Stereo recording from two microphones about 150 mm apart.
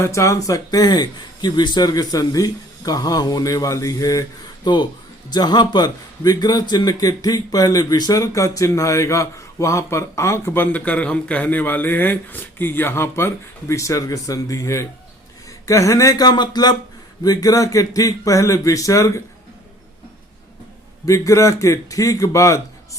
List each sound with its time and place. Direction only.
0.0 s a man's voice: 20° left (ahead or behind)
21.0 s a man's voice: 20° left (ahead or behind)